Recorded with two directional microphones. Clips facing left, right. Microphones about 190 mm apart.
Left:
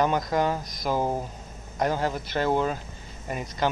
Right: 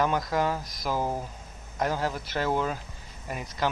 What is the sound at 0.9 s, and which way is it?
Speech, 20° left (ahead or behind).